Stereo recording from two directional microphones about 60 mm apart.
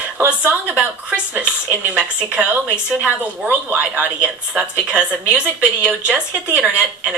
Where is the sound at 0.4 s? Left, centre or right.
Right.